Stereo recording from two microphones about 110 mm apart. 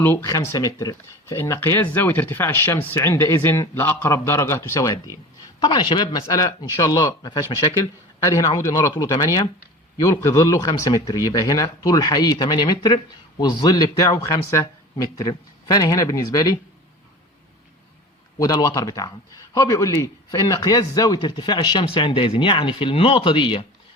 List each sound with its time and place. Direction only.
0.0 s speech: 20° left (ahead or behind)
5.5 s speech: 40° left (ahead or behind)
6.2 s speech: 35° left (ahead or behind)
18.3 s speech: 35° left (ahead or behind); by 23.6 s 50° left (ahead or behind)